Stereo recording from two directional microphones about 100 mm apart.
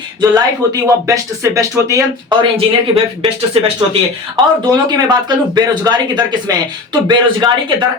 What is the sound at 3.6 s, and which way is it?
Speech, 70° right (ahead or behind).